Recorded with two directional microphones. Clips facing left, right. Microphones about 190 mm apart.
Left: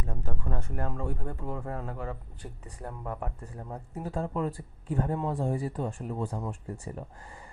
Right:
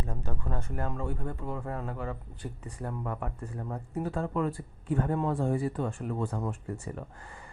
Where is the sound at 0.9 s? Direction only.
30° left (ahead or behind).